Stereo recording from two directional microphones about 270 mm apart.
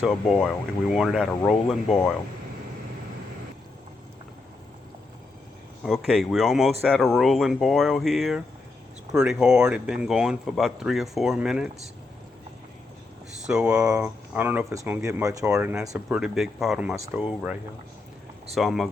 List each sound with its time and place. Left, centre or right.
0.0 s speech: centre
5.8 s speech: centre
13.5 s speech: centre